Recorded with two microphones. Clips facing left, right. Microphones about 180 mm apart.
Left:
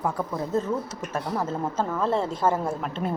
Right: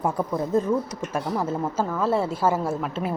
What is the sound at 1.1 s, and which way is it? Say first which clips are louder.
A woman's voice: right 2 dB; 10° right (ahead or behind).